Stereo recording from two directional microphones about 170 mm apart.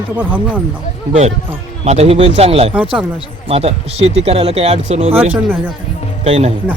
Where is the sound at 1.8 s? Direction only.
40° right (ahead or behind).